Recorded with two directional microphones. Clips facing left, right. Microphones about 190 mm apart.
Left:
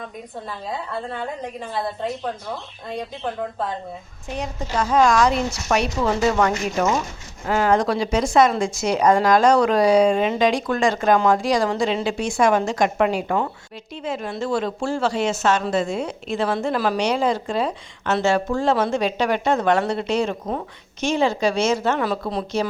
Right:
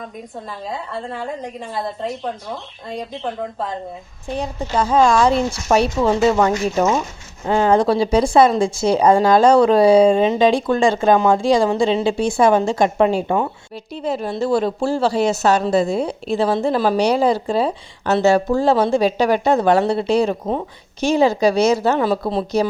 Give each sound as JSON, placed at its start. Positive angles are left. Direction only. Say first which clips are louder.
{"t": 0.7, "sound": "a woman's voice", "louder": "right 1 dB", "side_deg": 0}
{"t": 4.3, "sound": "speech", "louder": "right 4 dB", "side_deg": -30}
{"t": 13.9, "sound": "a woman's voice", "louder": "right 5 dB", "side_deg": -35}